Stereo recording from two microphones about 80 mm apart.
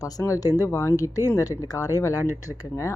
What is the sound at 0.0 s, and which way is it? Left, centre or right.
A woman's voice, left.